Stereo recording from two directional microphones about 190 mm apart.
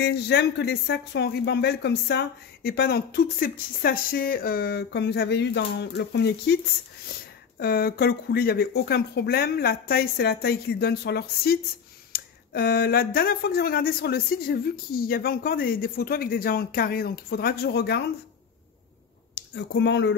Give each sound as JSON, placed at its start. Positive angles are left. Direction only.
{"t": 0.0, "sound": "speech", "side_deg": 60}
{"t": 19.3, "sound": "speech", "side_deg": 65}